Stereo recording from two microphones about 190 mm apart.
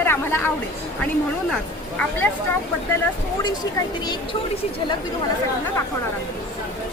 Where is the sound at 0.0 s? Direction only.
10° left (ahead or behind).